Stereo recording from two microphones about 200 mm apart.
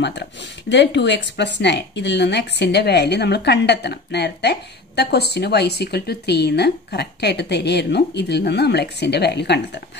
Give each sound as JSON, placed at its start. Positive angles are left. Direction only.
{"t": 0.0, "sound": "speech", "side_deg": 60}